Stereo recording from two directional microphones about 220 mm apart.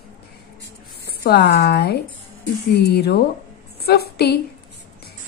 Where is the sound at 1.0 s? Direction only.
45° left (ahead or behind).